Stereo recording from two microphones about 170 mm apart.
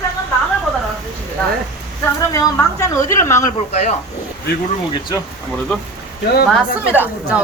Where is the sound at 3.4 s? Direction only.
40° left (ahead or behind).